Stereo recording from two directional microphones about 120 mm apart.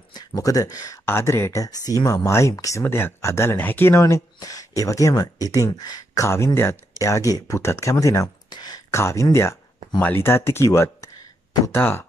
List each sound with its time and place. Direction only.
0.1 s speech: 35° left (ahead or behind)